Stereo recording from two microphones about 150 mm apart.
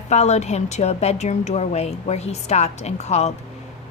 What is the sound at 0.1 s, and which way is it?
A woman's voice, 50° left (ahead or behind).